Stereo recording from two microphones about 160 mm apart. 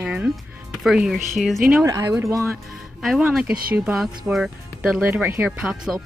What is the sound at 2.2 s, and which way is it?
Speech, 20° right (ahead or behind).